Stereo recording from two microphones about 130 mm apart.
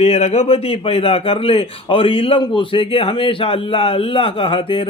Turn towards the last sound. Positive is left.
turn(degrees=45)  # may be behind; listen again after turning